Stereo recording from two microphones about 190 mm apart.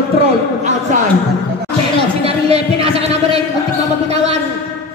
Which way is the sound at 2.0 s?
30° right (ahead or behind).